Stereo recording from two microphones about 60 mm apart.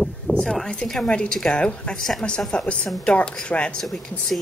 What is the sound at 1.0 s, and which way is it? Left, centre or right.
A woman's voice, centre.